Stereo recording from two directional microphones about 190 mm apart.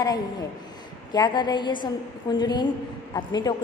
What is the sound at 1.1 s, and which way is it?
A woman's voice, 25° left (ahead or behind).